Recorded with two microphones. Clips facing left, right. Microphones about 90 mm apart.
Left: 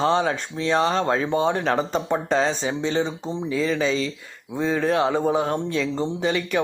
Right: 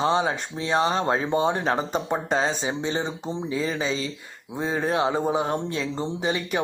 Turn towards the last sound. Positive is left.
turn(degrees=-25)  # may be behind; listen again after turning